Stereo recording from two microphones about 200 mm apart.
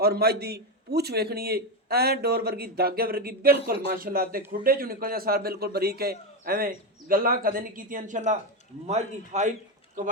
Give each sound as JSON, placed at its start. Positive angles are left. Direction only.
{"t": 0.0, "sound": "a man's voice", "side_deg": -50}